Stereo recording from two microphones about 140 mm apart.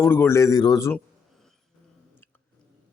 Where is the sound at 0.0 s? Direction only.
15° left (ahead or behind).